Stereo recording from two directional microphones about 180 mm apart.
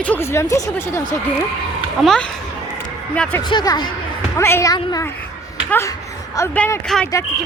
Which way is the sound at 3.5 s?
25° left (ahead or behind).